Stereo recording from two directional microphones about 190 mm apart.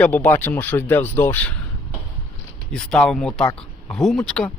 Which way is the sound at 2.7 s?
5° left (ahead or behind).